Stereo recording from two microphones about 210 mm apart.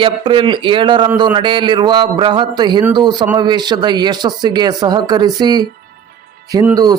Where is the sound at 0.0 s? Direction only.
25° right (ahead or behind).